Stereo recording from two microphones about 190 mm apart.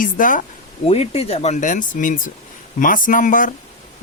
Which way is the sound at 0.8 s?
30° left (ahead or behind).